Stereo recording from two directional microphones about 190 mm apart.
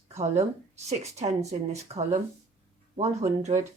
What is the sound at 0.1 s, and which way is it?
A woman's voice, 35° right (ahead or behind).